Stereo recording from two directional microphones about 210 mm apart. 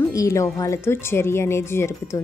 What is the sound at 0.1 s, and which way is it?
Speech, 15° left (ahead or behind).